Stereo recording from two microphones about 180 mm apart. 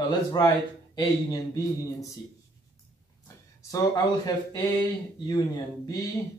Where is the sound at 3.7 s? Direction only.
20° left (ahead or behind).